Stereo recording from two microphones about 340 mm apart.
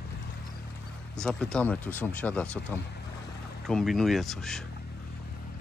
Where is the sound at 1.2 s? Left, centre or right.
Centre.